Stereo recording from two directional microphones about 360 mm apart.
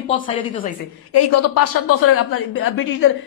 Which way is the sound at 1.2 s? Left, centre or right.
Left.